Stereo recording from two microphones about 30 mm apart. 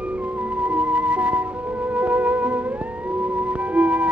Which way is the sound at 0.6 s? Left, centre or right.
Right.